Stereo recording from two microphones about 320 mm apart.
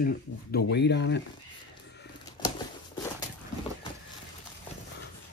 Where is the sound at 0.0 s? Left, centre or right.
Left.